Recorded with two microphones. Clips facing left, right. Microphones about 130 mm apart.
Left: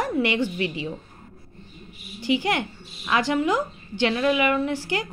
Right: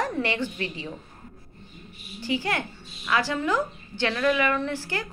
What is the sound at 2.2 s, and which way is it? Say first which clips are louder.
A woman's voice: left 4 dB; 15° left (ahead or behind).